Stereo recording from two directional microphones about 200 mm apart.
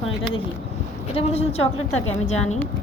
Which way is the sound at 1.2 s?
30° left (ahead or behind).